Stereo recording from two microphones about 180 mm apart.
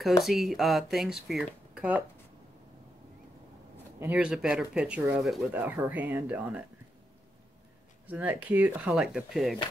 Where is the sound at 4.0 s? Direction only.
5° right (ahead or behind).